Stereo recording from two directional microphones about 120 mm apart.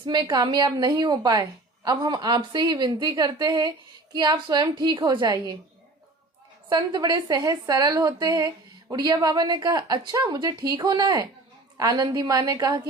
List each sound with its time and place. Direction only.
0.0 s a woman's voice: 40° right (ahead or behind)
6.7 s a woman's voice: 35° right (ahead or behind)